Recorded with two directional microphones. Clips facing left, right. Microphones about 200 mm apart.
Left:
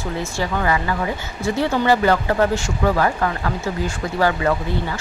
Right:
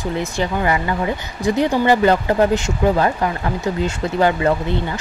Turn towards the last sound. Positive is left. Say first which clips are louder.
# right 2 dB
turn(degrees=-25)  # may be behind; listen again after turning